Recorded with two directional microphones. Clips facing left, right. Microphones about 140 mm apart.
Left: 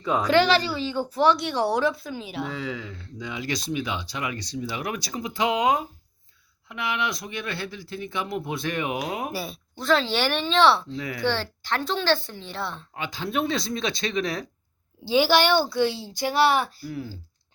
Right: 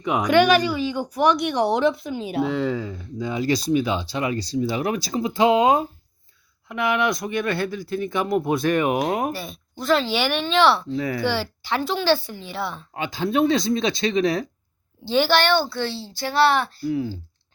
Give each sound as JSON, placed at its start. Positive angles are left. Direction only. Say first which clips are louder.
{"t": 0.0, "sound": "speech", "louder": "right 3 dB", "side_deg": -15}
{"t": 2.4, "sound": "speech", "louder": "right 9 dB", "side_deg": -65}
{"t": 3.2, "sound": "speech", "louder": "right 8 dB", "side_deg": -35}
{"t": 6.7, "sound": "speech", "louder": "right 7 dB", "side_deg": -50}
{"t": 9.3, "sound": "speech", "louder": "even", "side_deg": 5}
{"t": 10.9, "sound": "speech", "louder": "right 7 dB", "side_deg": -35}
{"t": 11.2, "sound": "speech", "louder": "right 2 dB", "side_deg": -5}
{"t": 12.9, "sound": "speech", "louder": "right 8 dB", "side_deg": -30}
{"t": 15.0, "sound": "speech", "louder": "right 1 dB", "side_deg": 10}
{"t": 16.9, "sound": "speech", "louder": "right 9 dB", "side_deg": -20}